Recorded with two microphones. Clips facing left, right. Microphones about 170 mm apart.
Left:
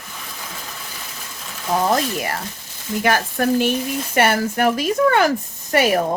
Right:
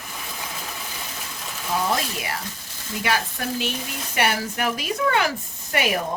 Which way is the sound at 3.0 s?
50° left (ahead or behind).